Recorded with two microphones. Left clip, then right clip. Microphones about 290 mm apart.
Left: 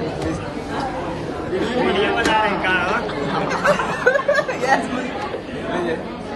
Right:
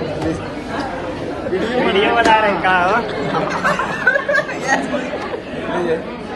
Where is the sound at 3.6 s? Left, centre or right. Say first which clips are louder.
Even; left.